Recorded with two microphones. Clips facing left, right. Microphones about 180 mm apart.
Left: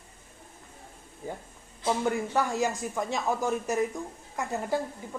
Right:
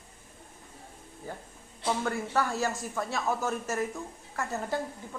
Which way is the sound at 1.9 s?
15° left (ahead or behind).